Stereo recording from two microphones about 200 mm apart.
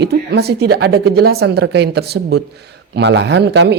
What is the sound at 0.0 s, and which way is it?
Speech, 55° right (ahead or behind).